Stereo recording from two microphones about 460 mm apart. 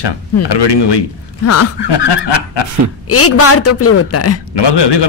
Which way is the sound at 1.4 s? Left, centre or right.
Left.